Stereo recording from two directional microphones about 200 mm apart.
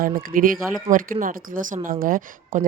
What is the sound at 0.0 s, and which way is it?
Speech, 45° right (ahead or behind).